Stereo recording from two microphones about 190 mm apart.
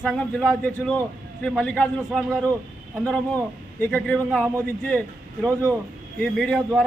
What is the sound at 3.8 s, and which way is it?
Speech, 5° left (ahead or behind).